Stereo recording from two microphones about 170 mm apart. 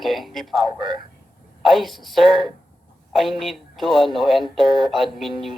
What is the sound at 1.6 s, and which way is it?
A man's voice, centre (ahead or behind).